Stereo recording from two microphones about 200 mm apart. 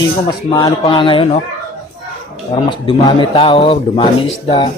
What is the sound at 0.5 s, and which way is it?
Speech, 20° left (ahead or behind).